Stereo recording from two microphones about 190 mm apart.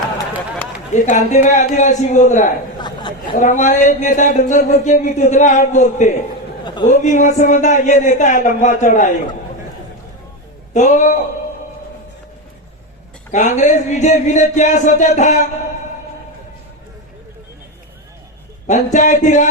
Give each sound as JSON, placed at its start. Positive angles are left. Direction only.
{"t": 0.9, "sound": "speech", "side_deg": 40}
{"t": 10.8, "sound": "speech", "side_deg": 40}
{"t": 13.3, "sound": "speech", "side_deg": 40}
{"t": 18.7, "sound": "speech", "side_deg": 40}